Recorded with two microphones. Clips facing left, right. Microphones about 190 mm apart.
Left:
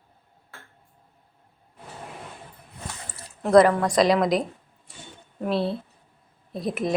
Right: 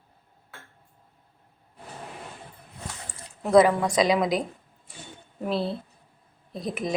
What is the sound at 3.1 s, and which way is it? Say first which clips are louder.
Speech: left 2 dB; centre (ahead or behind).